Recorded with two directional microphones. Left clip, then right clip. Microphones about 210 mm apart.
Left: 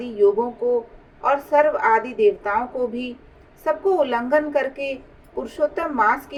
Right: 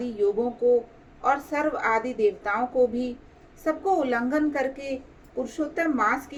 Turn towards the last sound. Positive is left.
turn(degrees=30)  # may be behind; listen again after turning